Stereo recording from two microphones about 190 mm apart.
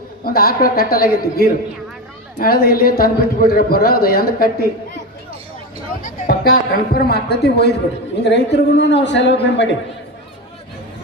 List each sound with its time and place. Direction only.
0.3 s a man's voice: 50° left (ahead or behind)
6.0 s a man's voice: 50° left (ahead or behind); by 9.6 s 70° left (ahead or behind)